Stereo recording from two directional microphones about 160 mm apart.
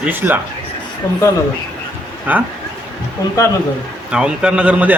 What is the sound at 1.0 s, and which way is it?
Speech, 25° left (ahead or behind).